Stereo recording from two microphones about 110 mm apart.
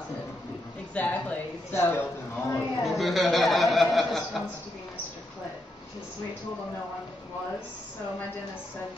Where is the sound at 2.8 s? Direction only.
Centre (ahead or behind).